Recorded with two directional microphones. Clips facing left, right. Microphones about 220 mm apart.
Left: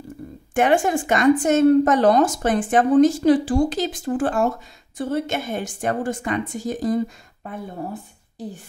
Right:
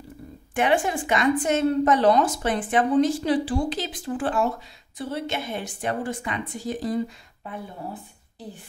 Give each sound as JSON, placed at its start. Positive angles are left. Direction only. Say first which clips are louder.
{"t": 0.6, "sound": "a woman's voice", "louder": "left 4 dB", "side_deg": 45}